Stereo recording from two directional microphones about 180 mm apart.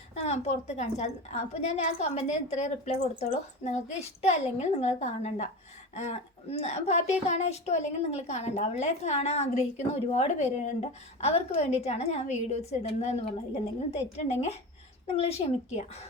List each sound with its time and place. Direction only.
0.1 s a woman's voice: 35° left (ahead or behind)